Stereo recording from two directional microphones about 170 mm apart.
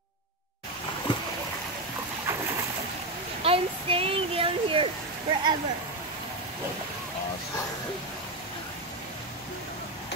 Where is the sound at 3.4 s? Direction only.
35° right (ahead or behind).